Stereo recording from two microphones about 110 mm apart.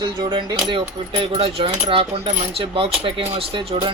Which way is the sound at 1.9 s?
55° right (ahead or behind).